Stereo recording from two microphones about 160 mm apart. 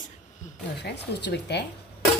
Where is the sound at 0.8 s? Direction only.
90° left.